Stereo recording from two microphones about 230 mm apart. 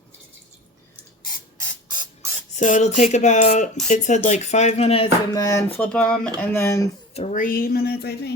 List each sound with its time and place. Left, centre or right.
1.9 s dental drill: centre
2.6 s speech: left
5.3 s speech: centre
7.1 s speech: left